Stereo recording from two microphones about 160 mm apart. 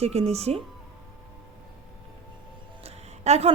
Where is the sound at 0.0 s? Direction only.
40° right (ahead or behind).